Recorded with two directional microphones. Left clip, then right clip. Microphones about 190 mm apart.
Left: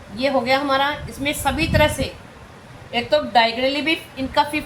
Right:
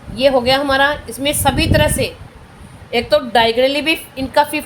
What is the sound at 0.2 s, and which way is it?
A woman's voice, 65° right (ahead or behind).